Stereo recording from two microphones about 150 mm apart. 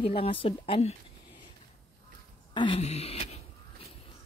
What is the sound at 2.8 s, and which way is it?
Wail, 45° left (ahead or behind).